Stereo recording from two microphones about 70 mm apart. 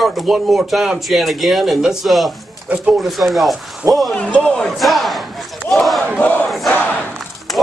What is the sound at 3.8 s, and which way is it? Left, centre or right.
Speech, right.